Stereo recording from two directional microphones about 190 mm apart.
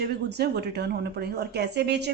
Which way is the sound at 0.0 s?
60° right (ahead or behind).